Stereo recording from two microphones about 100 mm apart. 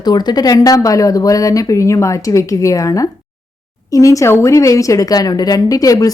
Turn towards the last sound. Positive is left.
turn(degrees=35)  # may be behind; listen again after turning